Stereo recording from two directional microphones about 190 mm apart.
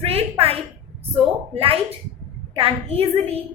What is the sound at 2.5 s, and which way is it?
Speech, 30° right (ahead or behind).